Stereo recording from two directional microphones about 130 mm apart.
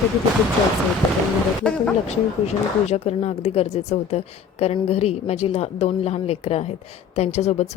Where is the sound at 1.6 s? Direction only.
10° left (ahead or behind).